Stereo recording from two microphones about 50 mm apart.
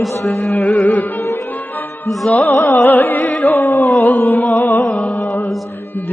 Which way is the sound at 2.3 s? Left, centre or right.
Left.